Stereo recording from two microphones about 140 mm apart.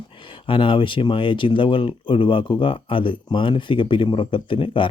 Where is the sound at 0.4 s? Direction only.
40° left (ahead or behind).